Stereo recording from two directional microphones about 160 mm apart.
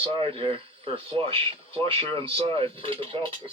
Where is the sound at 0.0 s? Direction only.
35° right (ahead or behind).